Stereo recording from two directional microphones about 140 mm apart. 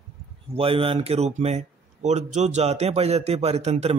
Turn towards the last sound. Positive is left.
turn(degrees=-50)  # may be behind; listen again after turning